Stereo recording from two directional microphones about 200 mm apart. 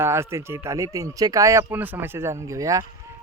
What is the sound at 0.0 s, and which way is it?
Speech, 15° right (ahead or behind).